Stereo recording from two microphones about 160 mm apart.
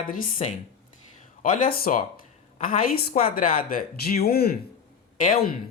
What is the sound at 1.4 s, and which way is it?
Speech, 60° left (ahead or behind).